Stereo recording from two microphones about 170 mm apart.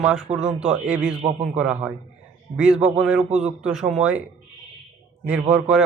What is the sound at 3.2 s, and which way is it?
Speech, 40° right (ahead or behind).